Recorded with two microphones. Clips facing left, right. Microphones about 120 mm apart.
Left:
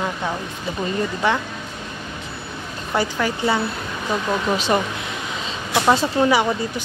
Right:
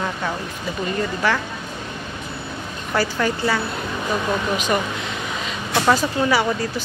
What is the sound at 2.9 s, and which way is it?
Speech, 20° left (ahead or behind).